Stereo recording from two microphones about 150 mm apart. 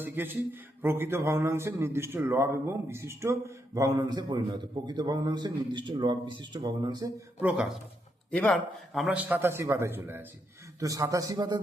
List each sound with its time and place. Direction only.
0.0 s a man's voice: 15° right (ahead or behind)
7.4 s speech: 10° right (ahead or behind)
8.3 s a man's voice: 10° left (ahead or behind)
8.9 s a man's voice: 5° right (ahead or behind); by 11.6 s 25° right (ahead or behind)